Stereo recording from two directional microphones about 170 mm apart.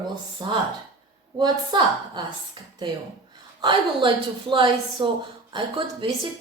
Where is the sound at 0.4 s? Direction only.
25° right (ahead or behind).